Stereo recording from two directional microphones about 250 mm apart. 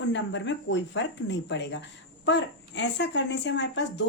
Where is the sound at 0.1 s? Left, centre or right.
Left.